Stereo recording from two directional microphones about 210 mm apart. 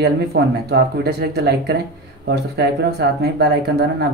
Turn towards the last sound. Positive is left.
turn(degrees=-50)  # may be behind; listen again after turning